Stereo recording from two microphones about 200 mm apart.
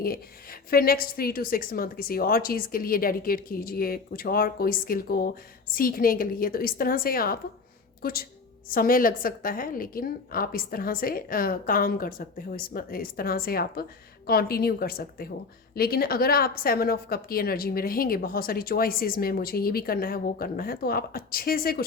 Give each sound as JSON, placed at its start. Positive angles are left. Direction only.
{"t": 0.7, "sound": "a woman's voice", "side_deg": 50}